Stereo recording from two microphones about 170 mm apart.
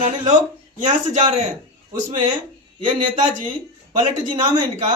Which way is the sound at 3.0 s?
50° right (ahead or behind).